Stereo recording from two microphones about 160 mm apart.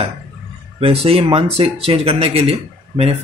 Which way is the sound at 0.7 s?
35° right (ahead or behind).